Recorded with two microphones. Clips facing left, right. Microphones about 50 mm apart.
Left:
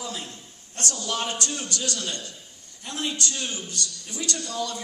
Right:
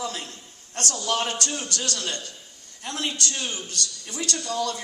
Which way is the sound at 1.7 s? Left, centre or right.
Right.